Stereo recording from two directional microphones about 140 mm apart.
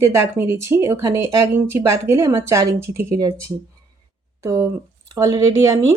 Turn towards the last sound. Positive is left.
turn(degrees=-25)  # may be behind; listen again after turning